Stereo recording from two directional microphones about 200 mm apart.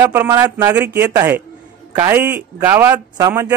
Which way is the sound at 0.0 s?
15° right (ahead or behind).